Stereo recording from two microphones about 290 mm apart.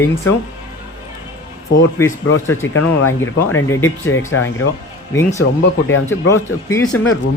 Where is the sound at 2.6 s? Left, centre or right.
Left.